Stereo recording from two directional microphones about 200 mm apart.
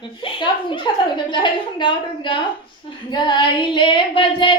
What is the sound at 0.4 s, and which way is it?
Child singing, 25° left (ahead or behind).